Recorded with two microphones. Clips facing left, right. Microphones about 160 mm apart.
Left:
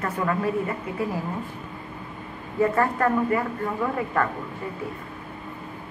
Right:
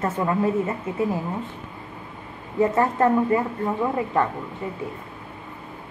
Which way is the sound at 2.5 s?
20° right (ahead or behind).